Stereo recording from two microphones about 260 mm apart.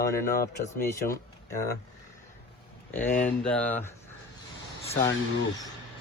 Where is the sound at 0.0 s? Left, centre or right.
Left.